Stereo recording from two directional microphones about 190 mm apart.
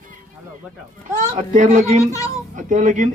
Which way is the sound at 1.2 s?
40° right (ahead or behind).